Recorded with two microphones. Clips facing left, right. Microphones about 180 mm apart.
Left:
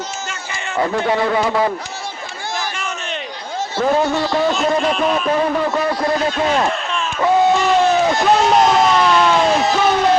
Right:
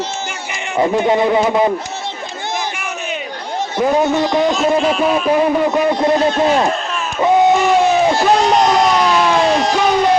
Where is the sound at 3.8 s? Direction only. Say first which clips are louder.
Right 2 dB; 20° right (ahead or behind).